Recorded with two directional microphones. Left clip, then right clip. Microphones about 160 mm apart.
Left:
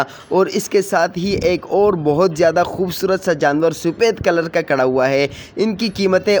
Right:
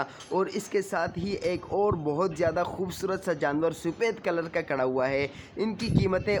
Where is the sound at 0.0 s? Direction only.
35° left (ahead or behind).